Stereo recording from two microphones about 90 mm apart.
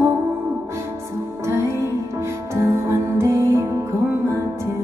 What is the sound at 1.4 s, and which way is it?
Music, 30° right (ahead or behind).